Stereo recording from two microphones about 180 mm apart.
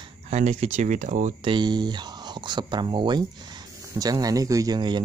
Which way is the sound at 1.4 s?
25° right (ahead or behind).